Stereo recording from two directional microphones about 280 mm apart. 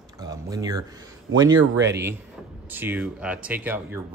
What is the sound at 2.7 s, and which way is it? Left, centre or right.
Speech, centre.